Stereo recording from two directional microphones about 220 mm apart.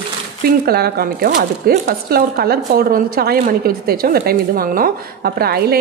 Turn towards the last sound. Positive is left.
turn(degrees=-45)  # may be behind; listen again after turning